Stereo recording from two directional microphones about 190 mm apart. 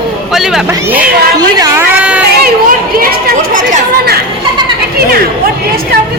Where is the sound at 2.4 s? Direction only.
50° right (ahead or behind).